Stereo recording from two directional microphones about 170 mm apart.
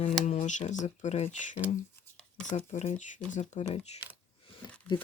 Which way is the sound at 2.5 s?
40° left (ahead or behind).